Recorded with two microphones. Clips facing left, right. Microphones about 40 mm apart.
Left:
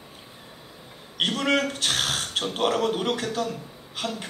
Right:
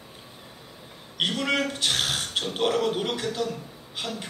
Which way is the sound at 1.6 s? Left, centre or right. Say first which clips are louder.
Even; centre.